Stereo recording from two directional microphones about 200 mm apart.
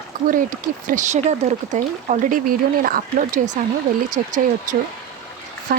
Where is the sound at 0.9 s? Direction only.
40° right (ahead or behind).